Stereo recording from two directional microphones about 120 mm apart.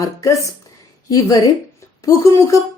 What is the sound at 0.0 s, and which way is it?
Speech, 30° left (ahead or behind).